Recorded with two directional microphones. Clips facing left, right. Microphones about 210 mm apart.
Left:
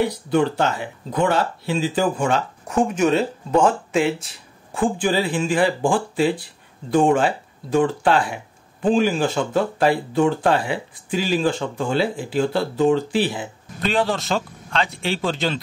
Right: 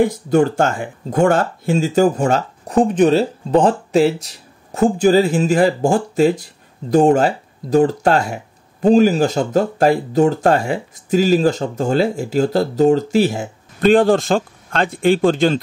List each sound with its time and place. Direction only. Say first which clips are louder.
0.0 s speech: right 5 dB; 45° right (ahead or behind)